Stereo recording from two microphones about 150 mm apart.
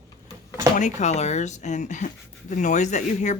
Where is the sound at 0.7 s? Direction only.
55° left (ahead or behind).